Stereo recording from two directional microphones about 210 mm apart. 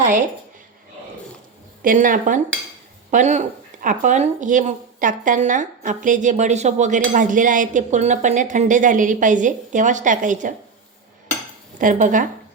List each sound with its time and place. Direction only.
1.8 s speech: 40° right (ahead or behind)
11.8 s speech: 40° right (ahead or behind)